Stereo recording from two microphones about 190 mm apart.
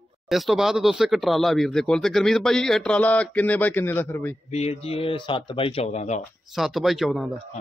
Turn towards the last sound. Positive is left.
turn(degrees=0)  # may be behind; listen again after turning